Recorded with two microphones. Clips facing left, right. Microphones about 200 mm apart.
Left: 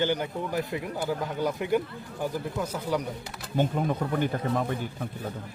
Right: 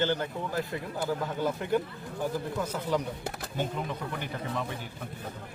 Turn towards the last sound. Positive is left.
turn(degrees=50)  # may be behind; listen again after turning